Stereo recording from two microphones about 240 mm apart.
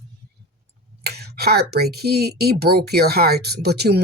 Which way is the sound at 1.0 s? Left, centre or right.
Right.